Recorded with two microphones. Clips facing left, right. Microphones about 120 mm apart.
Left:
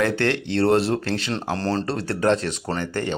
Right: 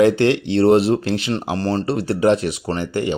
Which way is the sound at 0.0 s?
15° right (ahead or behind).